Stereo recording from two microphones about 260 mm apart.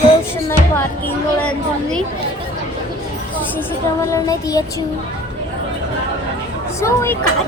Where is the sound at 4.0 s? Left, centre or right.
Centre.